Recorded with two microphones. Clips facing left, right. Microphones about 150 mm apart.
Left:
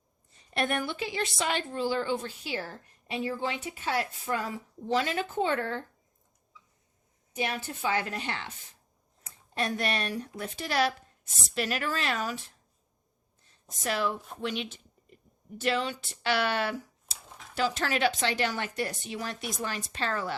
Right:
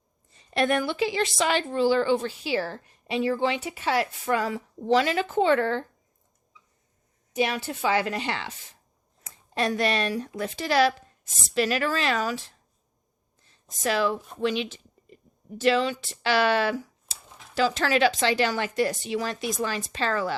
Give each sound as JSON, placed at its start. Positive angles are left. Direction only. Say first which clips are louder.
{"t": 0.3, "sound": "a woman's voice", "louder": "right 6 dB", "side_deg": -90}
{"t": 7.3, "sound": "a woman's voice", "louder": "right 6 dB", "side_deg": -90}
{"t": 13.4, "sound": "a sound", "louder": "right 6 dB", "side_deg": -90}
{"t": 14.4, "sound": "a woman's voice", "louder": "right 7 dB", "side_deg": -90}